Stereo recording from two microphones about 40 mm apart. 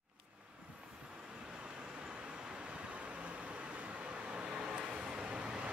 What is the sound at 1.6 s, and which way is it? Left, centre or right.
Vehicle, right.